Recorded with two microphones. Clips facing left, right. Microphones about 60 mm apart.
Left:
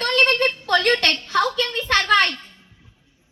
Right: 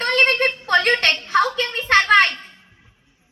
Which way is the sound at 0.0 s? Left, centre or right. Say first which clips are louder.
Right 1 dB; right.